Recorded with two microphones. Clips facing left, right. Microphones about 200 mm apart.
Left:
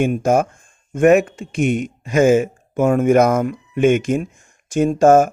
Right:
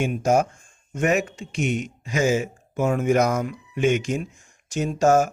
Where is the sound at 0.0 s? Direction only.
55° left (ahead or behind).